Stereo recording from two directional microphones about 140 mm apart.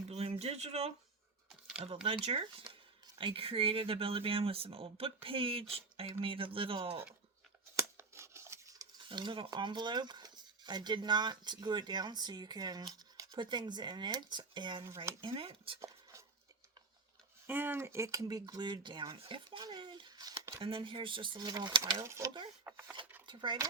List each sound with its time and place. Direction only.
0.1 s speech: 45° right (ahead or behind)
1.5 s a sound: centre (ahead or behind)
2.0 s speech: 45° right (ahead or behind)
7.8 s tearing: 20° right (ahead or behind)
9.0 s speech: 35° right (ahead or behind)
17.4 s speech: 15° right (ahead or behind)
20.6 s speech: 40° right (ahead or behind)
22.0 s speech: 20° right (ahead or behind)
23.2 s speech: 35° right (ahead or behind)